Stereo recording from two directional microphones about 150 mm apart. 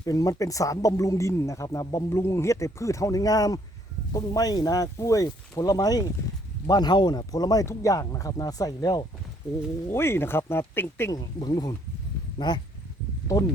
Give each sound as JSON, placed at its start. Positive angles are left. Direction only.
{"t": 0.0, "sound": "speech", "side_deg": 25}